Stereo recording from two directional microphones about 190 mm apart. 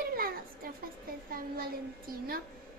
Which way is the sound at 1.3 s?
50° right (ahead or behind).